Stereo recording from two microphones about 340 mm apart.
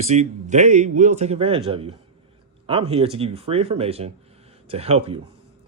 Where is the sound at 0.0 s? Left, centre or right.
Centre.